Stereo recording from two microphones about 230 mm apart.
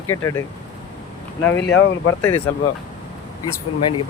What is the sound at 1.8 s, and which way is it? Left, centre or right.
Speech, left.